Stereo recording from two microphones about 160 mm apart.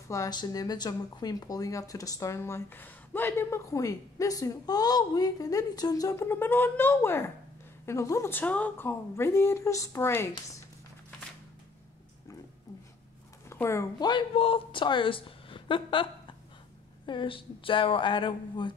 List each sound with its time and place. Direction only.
0.1 s a woman's voice: 25° left (ahead or behind)
13.5 s a woman's voice: 15° left (ahead or behind)